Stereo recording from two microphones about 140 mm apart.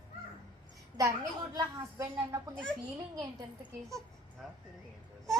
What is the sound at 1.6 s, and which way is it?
A woman's voice, 20° right (ahead or behind).